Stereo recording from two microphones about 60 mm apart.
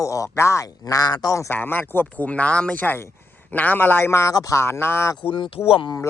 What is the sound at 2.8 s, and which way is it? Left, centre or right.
Speech, left.